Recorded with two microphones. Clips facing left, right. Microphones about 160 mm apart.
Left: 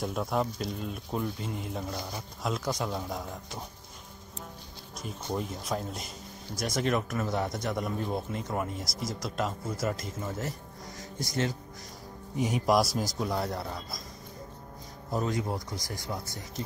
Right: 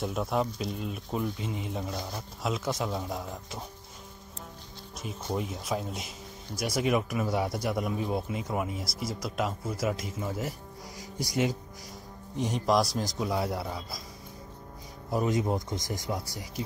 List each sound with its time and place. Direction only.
0.0 s speech: centre (ahead or behind)
4.9 s speech: 5° right (ahead or behind)
12.4 s speech: 5° left (ahead or behind)
15.2 s speech: 20° right (ahead or behind)